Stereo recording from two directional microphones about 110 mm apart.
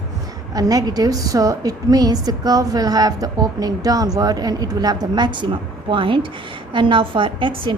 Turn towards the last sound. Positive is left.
turn(degrees=-50)  # may be behind; listen again after turning